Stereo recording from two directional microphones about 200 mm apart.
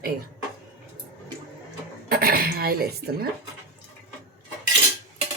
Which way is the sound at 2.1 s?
50° right (ahead or behind).